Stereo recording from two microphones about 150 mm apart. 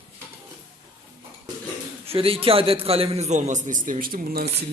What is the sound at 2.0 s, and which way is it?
A man's voice, 40° right (ahead or behind).